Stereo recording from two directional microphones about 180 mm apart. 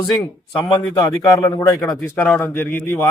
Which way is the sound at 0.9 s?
15° left (ahead or behind).